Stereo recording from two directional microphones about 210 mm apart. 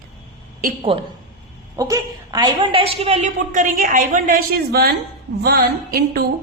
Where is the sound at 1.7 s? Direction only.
15° right (ahead or behind); by 4.9 s 45° right (ahead or behind).